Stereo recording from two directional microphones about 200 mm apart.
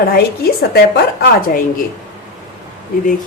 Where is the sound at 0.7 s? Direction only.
50° left (ahead or behind).